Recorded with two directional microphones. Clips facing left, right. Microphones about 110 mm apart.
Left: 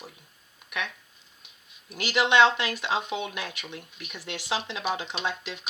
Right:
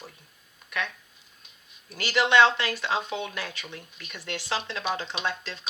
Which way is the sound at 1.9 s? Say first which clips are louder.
Right 1 dB; 15° left (ahead or behind).